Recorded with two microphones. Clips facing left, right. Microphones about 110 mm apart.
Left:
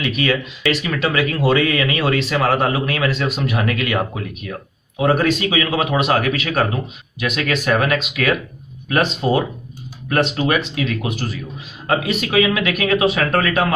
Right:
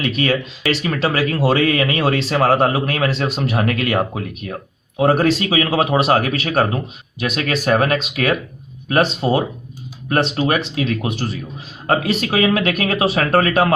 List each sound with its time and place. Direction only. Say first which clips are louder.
0.2 s speech: right 1 dB; 35° right (ahead or behind)
11.9 s speech: right 2 dB; 40° right (ahead or behind)